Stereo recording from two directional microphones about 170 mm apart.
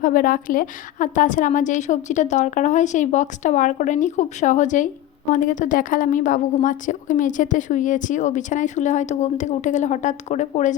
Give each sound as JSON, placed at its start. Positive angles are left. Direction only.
{"t": 0.0, "sound": "a woman's voice", "side_deg": 55}